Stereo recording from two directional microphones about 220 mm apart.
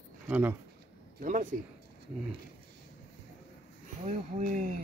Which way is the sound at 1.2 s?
35° right (ahead or behind).